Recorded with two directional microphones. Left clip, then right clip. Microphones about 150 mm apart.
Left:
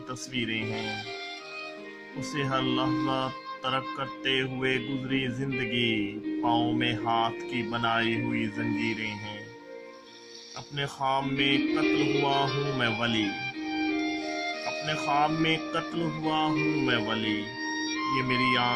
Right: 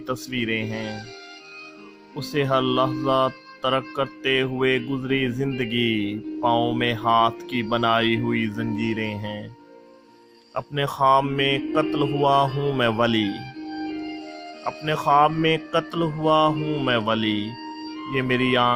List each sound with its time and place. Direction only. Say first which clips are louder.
0.1 s speech: right 6 dB; 40° right (ahead or behind)
2.3 s speech: right 7 dB; 40° right (ahead or behind)
10.8 s speech: right 10 dB; 50° right (ahead or behind)
13.8 s music: left 4 dB; 10° left (ahead or behind)
14.7 s speech: right 10 dB; 50° right (ahead or behind)